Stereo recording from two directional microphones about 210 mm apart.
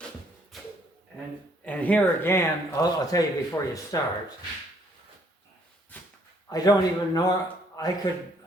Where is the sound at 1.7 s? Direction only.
5° left (ahead or behind).